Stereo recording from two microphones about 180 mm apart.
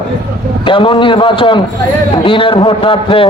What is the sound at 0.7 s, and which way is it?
A man's voice, 30° left (ahead or behind).